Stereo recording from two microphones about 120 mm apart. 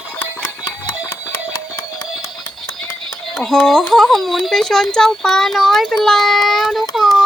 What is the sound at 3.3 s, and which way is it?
Speech, centre (ahead or behind).